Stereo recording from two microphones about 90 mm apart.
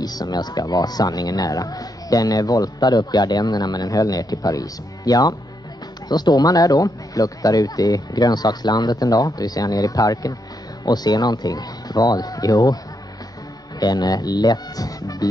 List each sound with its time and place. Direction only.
0.0 s speech: 45° left (ahead or behind)
13.7 s speech: 50° left (ahead or behind)